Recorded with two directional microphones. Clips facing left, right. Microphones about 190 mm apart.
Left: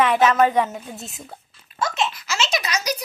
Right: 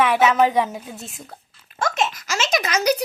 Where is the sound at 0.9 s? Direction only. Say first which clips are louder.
Even; centre (ahead or behind).